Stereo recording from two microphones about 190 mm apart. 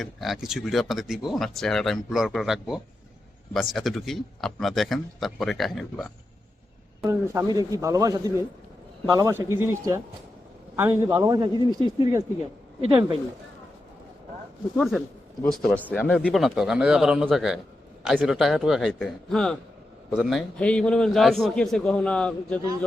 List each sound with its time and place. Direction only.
0.0 s speech: centre (ahead or behind)
7.0 s a man's voice: 15° right (ahead or behind)
14.8 s speech: centre (ahead or behind)